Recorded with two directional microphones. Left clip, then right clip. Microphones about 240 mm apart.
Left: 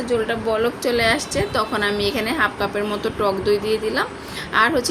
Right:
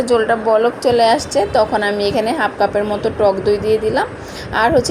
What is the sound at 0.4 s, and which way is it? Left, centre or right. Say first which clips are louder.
A woman's voice: right 7 dB; centre.